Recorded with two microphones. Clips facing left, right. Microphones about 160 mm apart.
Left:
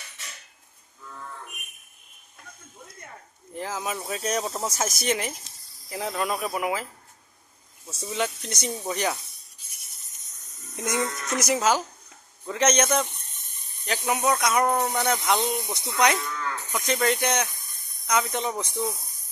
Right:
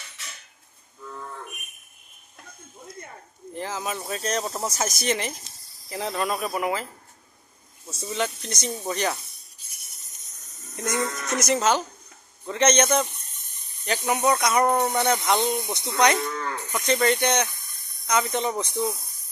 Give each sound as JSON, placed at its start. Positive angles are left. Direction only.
{"t": 3.5, "sound": "speech", "side_deg": 0}
{"t": 7.9, "sound": "speech", "side_deg": 10}
{"t": 10.8, "sound": "speech", "side_deg": 15}
{"t": 14.1, "sound": "speech", "side_deg": 0}
{"t": 16.3, "sound": "cattle", "side_deg": -40}
{"t": 16.7, "sound": "speech", "side_deg": 5}